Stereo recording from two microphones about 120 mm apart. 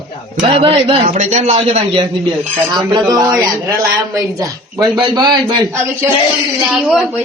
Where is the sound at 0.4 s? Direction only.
50° right (ahead or behind).